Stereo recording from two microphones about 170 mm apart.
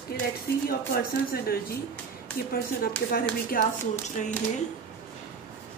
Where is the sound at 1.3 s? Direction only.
60° left (ahead or behind).